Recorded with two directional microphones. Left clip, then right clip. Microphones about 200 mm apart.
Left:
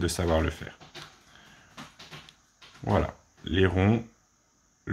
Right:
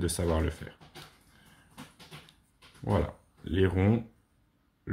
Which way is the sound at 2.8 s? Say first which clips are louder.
Left 4 dB; 10° left (ahead or behind).